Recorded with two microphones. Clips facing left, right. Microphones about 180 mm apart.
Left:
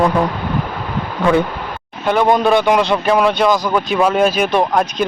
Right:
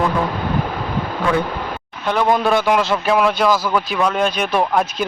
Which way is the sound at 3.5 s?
15° left (ahead or behind).